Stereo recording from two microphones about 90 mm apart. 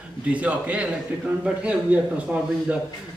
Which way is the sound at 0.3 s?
15° right (ahead or behind).